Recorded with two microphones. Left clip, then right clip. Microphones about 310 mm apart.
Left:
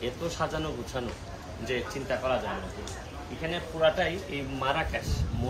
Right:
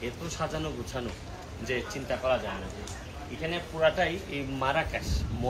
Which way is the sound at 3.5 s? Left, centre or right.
Centre.